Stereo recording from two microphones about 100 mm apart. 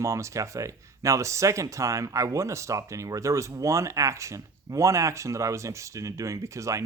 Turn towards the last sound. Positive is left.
turn(degrees=-30)  # may be behind; listen again after turning